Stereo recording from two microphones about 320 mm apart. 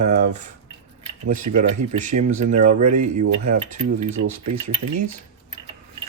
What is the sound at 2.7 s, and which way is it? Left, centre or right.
Speech, right.